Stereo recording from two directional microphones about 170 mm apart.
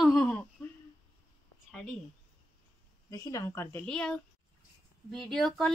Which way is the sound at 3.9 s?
5° left (ahead or behind).